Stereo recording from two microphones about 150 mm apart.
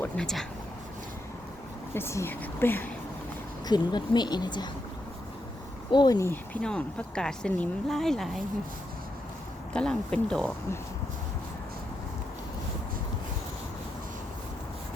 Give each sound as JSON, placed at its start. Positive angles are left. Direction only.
{"t": 0.0, "sound": "speech", "side_deg": 5}
{"t": 1.9, "sound": "a woman's voice", "side_deg": 15}
{"t": 3.7, "sound": "speech", "side_deg": 30}
{"t": 5.9, "sound": "speech", "side_deg": 30}
{"t": 9.7, "sound": "speech", "side_deg": 5}